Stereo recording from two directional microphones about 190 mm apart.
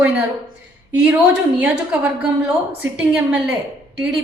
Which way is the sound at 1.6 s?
5° right (ahead or behind).